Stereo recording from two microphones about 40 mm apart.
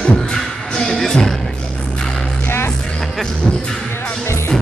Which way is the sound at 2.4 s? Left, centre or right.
Left.